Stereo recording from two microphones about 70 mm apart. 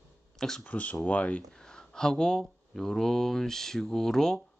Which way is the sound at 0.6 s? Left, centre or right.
Left.